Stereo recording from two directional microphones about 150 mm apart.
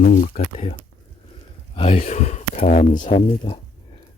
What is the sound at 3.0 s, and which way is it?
Speech, 40° left (ahead or behind).